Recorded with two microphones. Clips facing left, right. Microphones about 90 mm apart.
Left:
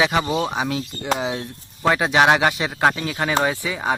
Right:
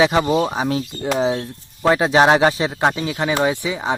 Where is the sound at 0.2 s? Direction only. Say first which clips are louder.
Right 4 dB; 5° right (ahead or behind).